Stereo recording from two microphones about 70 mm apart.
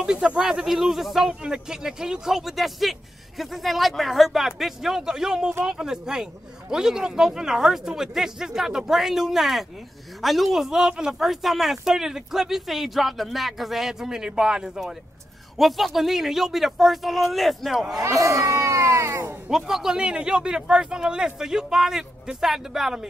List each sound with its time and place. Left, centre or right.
0.0 s speech: centre
18.0 s speech: right
19.5 s speech: centre